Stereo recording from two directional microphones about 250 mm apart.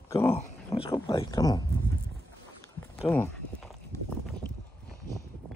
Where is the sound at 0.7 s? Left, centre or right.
Centre.